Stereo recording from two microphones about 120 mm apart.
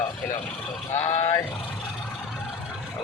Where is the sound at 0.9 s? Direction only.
65° left (ahead or behind).